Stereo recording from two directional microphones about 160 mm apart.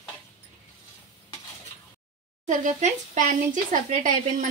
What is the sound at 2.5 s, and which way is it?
Speech, 50° right (ahead or behind).